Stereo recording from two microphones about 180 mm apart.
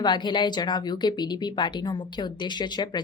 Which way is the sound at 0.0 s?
25° left (ahead or behind).